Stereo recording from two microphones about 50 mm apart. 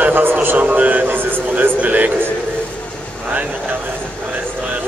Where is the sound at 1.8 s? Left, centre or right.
Right.